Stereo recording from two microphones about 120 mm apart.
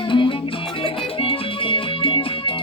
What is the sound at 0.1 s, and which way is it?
Music, 45° left (ahead or behind).